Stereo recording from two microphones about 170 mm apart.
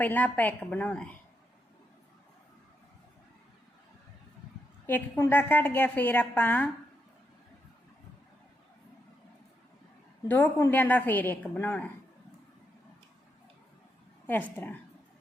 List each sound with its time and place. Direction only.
0.0 s a woman's voice: 10° left (ahead or behind)
4.9 s a woman's voice: 10° left (ahead or behind)
10.2 s a woman's voice: 10° left (ahead or behind)
14.3 s a woman's voice: 10° left (ahead or behind)